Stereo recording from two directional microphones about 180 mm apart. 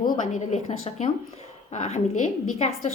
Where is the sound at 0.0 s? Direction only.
50° left (ahead or behind).